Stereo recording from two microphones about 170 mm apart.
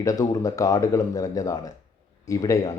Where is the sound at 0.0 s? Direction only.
20° left (ahead or behind).